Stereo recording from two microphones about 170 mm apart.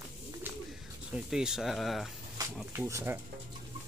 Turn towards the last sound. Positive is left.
turn(degrees=-15)  # may be behind; listen again after turning